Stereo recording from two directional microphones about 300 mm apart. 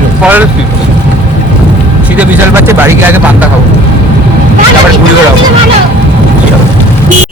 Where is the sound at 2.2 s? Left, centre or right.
Centre.